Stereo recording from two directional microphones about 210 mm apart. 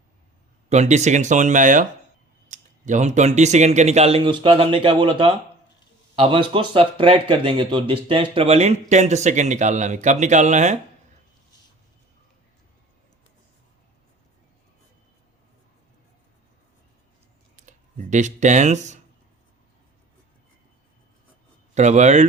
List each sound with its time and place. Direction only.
0.7 s speech: 35° right (ahead or behind)
17.6 s speech: 35° right (ahead or behind)
21.8 s speech: 35° right (ahead or behind)